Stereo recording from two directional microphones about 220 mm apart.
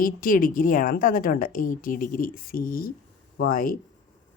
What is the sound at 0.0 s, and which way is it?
A woman's voice, 40° left (ahead or behind).